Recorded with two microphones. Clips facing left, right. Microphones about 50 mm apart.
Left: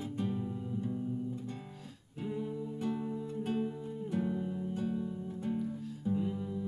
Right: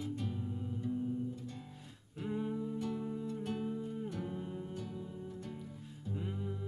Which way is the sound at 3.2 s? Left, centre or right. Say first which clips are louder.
Left 4 dB; left.